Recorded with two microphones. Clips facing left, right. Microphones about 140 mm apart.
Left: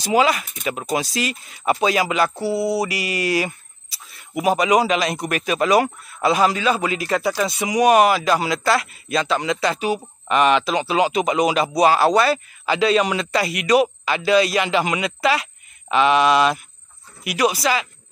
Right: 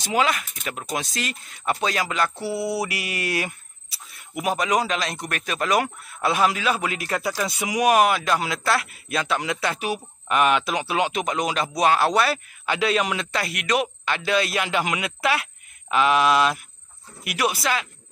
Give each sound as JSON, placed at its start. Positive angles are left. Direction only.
{"t": 0.0, "sound": "a man's voice", "side_deg": 5}
{"t": 2.5, "sound": "mantra", "side_deg": 35}
{"t": 2.8, "sound": "a man's voice", "side_deg": 0}